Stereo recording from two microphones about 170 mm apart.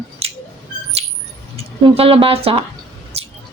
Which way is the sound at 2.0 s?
30° right (ahead or behind).